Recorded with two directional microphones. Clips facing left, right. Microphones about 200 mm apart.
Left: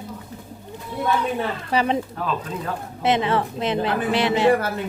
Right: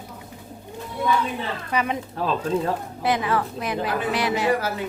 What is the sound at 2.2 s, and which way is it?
Speech, 30° right (ahead or behind).